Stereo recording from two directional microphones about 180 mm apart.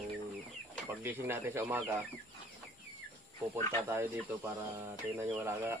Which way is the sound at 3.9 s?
10° right (ahead or behind).